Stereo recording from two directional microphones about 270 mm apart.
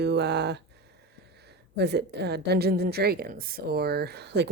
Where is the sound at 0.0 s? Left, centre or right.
Right.